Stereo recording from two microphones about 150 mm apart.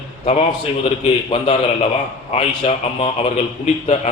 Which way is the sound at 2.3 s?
40° left (ahead or behind).